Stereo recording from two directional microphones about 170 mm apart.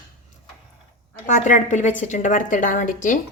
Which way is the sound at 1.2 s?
50° left (ahead or behind).